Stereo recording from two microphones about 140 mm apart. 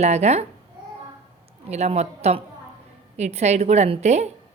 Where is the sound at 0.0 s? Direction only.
50° right (ahead or behind).